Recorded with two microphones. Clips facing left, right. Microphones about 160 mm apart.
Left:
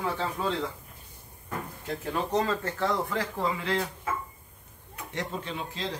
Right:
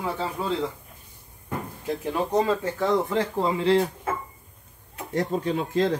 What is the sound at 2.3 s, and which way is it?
Speech, 10° right (ahead or behind).